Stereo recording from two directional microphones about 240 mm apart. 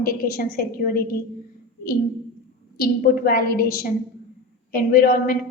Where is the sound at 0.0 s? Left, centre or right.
Left.